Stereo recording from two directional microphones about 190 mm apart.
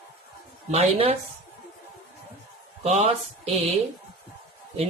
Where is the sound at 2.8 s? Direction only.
35° right (ahead or behind).